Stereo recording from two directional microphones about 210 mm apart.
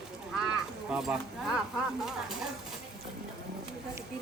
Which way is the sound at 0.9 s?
5° right (ahead or behind).